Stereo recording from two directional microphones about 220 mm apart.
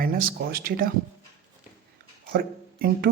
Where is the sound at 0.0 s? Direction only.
40° right (ahead or behind).